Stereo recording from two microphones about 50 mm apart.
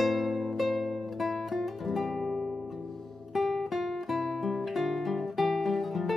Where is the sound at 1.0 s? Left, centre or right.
Centre.